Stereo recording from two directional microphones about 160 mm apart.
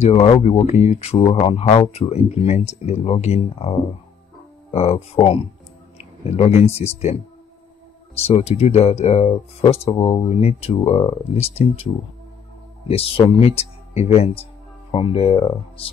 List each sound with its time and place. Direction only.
0.0 s speech: 40° left (ahead or behind)
8.2 s speech: 40° left (ahead or behind)